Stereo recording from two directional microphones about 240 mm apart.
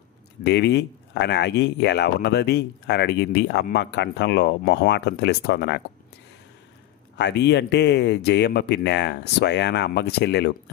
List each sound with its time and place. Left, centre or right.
0.4 s speech: left
7.2 s speech: left